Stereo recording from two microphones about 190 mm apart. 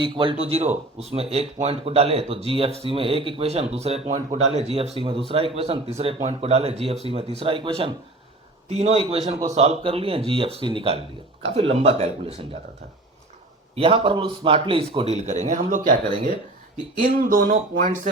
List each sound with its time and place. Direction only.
0.0 s a man's voice: 25° right (ahead or behind)
13.7 s a man's voice: 30° right (ahead or behind); by 16.0 s 45° right (ahead or behind)
17.2 s speech: 45° right (ahead or behind)